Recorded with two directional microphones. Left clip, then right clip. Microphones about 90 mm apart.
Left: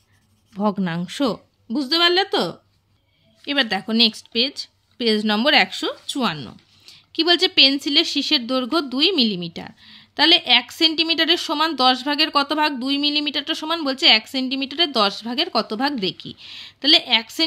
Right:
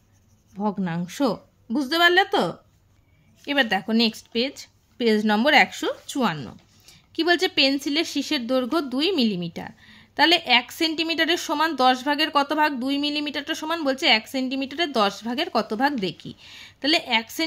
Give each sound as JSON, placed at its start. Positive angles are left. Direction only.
{"t": 0.6, "sound": "speech", "side_deg": 55}
{"t": 1.7, "sound": "a woman's voice", "side_deg": 15}